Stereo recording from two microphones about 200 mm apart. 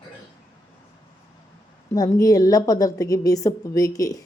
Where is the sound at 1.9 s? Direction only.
15° left (ahead or behind).